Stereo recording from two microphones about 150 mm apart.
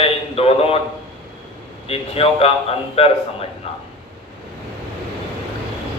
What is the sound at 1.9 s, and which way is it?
A man's voice, 40° left (ahead or behind).